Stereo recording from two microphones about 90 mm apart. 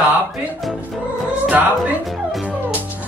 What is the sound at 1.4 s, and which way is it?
Speech, 15° right (ahead or behind).